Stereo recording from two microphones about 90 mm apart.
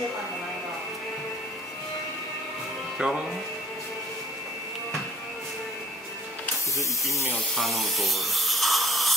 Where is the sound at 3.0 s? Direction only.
5° right (ahead or behind).